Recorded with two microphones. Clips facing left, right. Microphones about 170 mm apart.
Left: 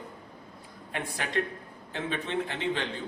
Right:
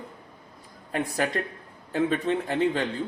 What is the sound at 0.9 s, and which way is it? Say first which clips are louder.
A man's voice: right 8 dB; 40° right (ahead or behind).